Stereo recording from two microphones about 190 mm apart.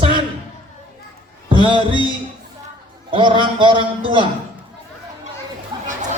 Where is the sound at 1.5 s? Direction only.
25° right (ahead or behind).